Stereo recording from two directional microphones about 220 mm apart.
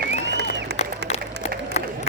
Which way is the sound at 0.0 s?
50° right (ahead or behind).